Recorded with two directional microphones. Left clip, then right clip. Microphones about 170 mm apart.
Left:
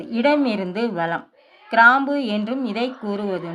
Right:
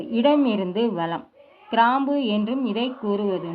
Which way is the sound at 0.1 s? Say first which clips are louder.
Left 1 dB; 45° left (ahead or behind).